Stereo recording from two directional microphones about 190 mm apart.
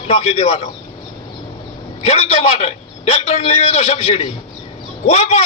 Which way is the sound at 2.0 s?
30° left (ahead or behind).